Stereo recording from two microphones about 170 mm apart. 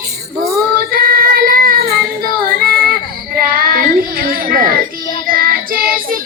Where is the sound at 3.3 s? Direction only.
60° right (ahead or behind).